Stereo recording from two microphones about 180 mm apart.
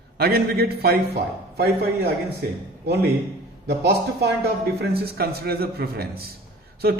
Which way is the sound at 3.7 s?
70° right (ahead or behind).